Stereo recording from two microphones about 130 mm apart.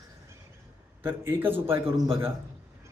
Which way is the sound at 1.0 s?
15° right (ahead or behind).